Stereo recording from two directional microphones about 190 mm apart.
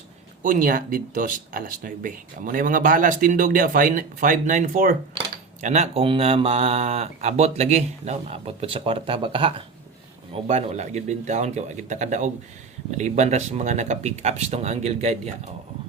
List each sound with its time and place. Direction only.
0.4 s speech: 45° right (ahead or behind)